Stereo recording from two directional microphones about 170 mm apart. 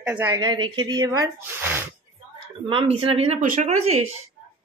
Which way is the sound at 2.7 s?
35° right (ahead or behind).